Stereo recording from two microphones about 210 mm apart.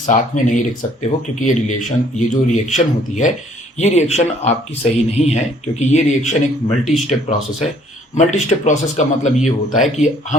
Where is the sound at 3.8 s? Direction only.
35° left (ahead or behind).